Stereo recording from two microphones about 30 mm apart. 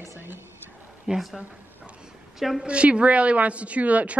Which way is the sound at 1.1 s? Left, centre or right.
Right.